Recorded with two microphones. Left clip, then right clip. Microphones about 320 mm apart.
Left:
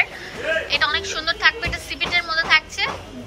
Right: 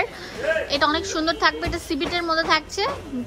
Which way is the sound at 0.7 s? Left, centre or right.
Centre.